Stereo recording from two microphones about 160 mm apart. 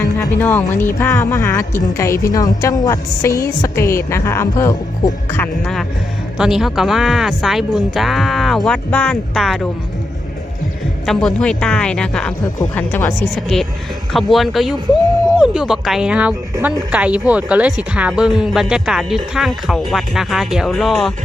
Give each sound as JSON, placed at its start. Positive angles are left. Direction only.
{"t": 0.3, "sound": "a woman's voice", "side_deg": 10}
{"t": 6.3, "sound": "speech", "side_deg": -5}
{"t": 11.0, "sound": "speech", "side_deg": 0}
{"t": 13.3, "sound": "speech", "side_deg": 0}